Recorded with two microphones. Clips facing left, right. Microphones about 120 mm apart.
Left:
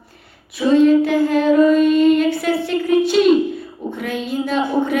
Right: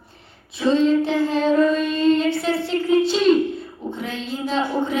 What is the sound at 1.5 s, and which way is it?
Child singing, 15° left (ahead or behind).